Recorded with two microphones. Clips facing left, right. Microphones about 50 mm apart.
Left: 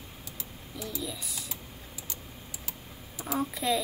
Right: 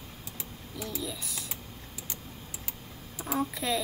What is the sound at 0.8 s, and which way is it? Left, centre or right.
Speech, centre.